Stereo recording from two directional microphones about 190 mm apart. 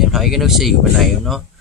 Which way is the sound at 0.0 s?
Centre (ahead or behind).